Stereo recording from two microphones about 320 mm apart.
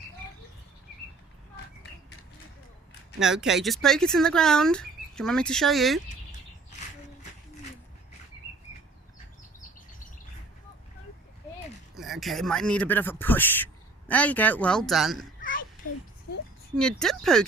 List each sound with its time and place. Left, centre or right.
3.2 s speech: centre
6.7 s bird: left
11.9 s speech: centre
15.4 s a sound: left
16.7 s speech: centre